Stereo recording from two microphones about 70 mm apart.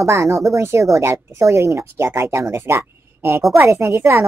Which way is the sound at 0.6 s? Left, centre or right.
Right.